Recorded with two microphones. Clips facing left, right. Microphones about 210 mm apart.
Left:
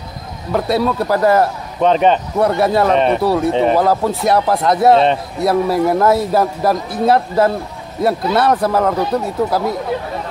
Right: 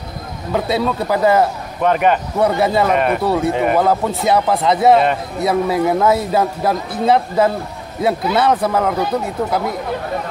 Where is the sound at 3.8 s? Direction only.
Centre (ahead or behind).